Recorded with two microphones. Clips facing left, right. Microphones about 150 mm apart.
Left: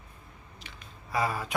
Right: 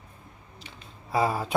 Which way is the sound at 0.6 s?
30° right (ahead or behind).